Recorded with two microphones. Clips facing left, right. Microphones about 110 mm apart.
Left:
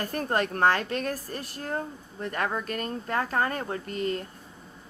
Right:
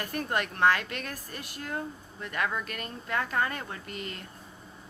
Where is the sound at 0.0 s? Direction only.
35° left (ahead or behind).